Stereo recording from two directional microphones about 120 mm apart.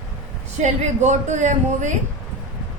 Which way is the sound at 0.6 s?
75° right (ahead or behind).